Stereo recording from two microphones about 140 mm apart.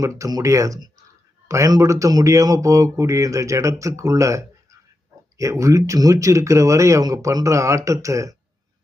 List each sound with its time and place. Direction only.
0.0 s speech: 25° right (ahead or behind)